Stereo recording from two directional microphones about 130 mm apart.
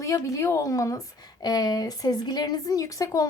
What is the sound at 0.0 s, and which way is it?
A woman's voice, 25° left (ahead or behind).